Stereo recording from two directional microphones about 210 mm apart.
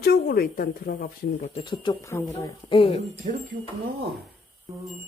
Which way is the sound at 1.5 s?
25° left (ahead or behind).